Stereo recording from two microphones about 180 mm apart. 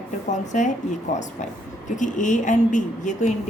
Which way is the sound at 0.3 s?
40° left (ahead or behind).